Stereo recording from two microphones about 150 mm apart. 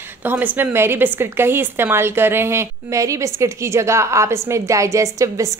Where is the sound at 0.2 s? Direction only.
15° right (ahead or behind).